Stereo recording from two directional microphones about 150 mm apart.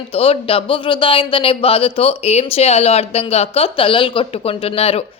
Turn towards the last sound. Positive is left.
turn(degrees=40)  # may be behind; listen again after turning